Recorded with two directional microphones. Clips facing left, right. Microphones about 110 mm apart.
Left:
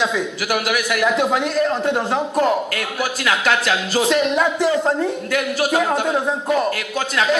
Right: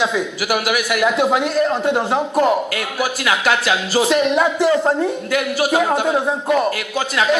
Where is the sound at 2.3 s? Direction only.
10° right (ahead or behind).